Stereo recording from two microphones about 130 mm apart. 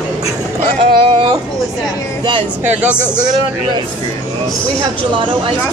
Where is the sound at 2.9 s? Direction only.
15° left (ahead or behind).